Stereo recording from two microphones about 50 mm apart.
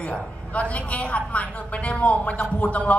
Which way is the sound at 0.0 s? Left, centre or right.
Left.